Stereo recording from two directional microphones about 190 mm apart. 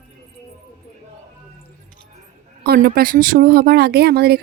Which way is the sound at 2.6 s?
55° right (ahead or behind).